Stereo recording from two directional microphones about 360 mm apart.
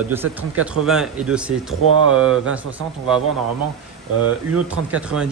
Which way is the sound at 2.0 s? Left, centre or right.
Right.